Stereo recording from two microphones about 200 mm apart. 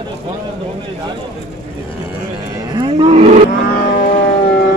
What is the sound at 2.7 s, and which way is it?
Cattle, 20° right (ahead or behind).